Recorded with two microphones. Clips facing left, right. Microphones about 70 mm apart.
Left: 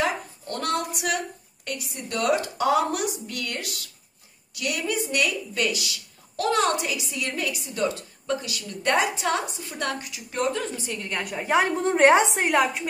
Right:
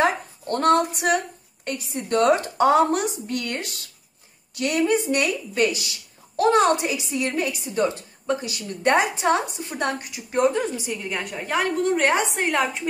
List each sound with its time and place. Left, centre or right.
0.0 s a woman's voice: right
10.9 s a woman's voice: centre
11.5 s a woman's voice: centre
12.3 s a woman's voice: centre